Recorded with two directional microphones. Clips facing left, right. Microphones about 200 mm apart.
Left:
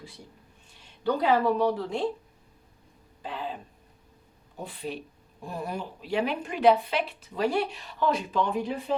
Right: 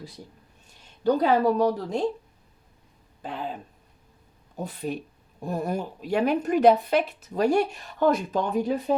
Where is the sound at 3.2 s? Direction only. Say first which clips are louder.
Right 2 dB; 50° right (ahead or behind).